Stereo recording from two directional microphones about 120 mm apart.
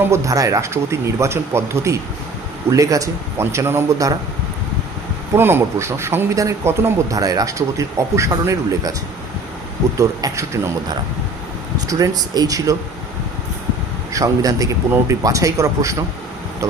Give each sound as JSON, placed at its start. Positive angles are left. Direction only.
{"t": 0.0, "sound": "a man's voice", "side_deg": -25}
{"t": 5.3, "sound": "a man's voice", "side_deg": -20}
{"t": 10.0, "sound": "a man's voice", "side_deg": -30}
{"t": 11.9, "sound": "a man's voice", "side_deg": -30}
{"t": 14.1, "sound": "a man's voice", "side_deg": -30}